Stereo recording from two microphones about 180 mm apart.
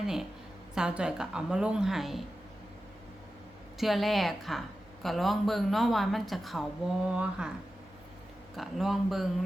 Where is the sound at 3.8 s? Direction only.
Centre (ahead or behind).